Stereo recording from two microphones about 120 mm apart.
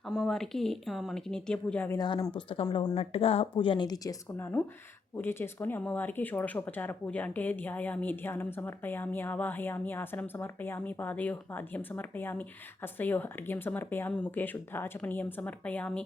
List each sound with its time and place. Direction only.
0.0 s speech: centre (ahead or behind)
2.0 s speech: 35° left (ahead or behind)
2.9 s speech: 55° left (ahead or behind); by 4.2 s 30° left (ahead or behind)
4.4 s speech: 20° left (ahead or behind)